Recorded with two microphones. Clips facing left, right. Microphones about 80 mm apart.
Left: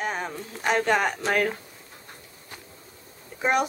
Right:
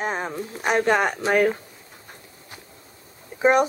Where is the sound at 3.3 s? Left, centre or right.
Centre.